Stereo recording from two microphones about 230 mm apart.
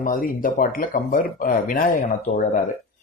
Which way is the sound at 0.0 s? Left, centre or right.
Left.